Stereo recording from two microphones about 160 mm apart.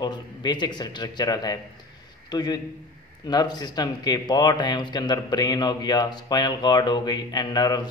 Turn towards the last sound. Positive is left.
turn(degrees=25)  # may be behind; listen again after turning